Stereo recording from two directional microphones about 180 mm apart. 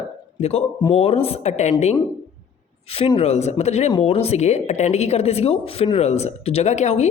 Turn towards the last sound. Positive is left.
turn(degrees=40)  # may be behind; listen again after turning